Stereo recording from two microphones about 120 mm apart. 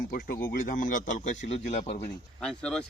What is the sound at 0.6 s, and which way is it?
A man's voice, 90° left.